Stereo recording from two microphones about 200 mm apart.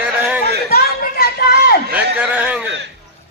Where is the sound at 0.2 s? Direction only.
10° right (ahead or behind).